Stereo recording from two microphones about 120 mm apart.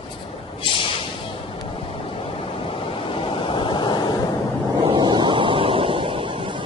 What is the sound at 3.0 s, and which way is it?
Waves, 50° left (ahead or behind).